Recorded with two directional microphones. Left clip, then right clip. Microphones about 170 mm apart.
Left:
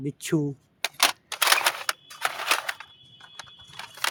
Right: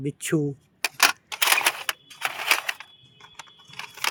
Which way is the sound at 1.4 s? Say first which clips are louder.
Even; centre (ahead or behind).